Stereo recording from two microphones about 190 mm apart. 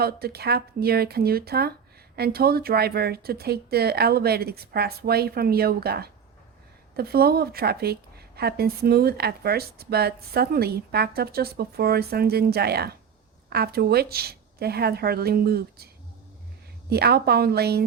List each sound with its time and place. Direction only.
0.0 s a woman's voice: 55° right (ahead or behind)
16.9 s a woman's voice: 55° right (ahead or behind)